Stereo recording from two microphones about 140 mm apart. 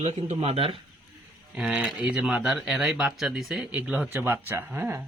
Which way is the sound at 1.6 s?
5° right (ahead or behind).